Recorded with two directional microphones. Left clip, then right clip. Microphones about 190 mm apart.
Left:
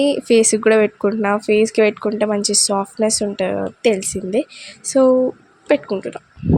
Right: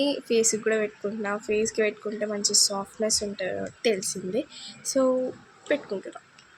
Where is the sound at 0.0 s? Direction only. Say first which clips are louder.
Left 10 dB; 40° left (ahead or behind).